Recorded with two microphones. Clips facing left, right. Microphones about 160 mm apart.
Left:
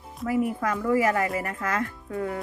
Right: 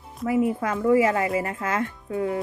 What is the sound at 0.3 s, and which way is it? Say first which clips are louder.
A woman's voice: right 3 dB; 25° right (ahead or behind).